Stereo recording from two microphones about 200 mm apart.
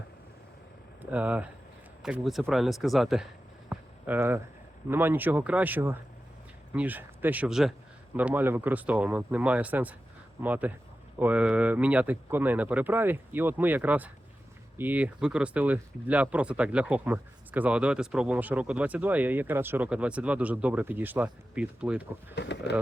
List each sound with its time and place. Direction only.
1.1 s a man's voice: 5° right (ahead or behind)
3.7 s a sound: 10° right (ahead or behind)
4.9 s speech: 10° right (ahead or behind)
22.4 s speech: 60° left (ahead or behind)